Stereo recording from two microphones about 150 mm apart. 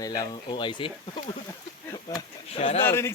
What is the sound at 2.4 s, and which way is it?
Speech, 40° left (ahead or behind).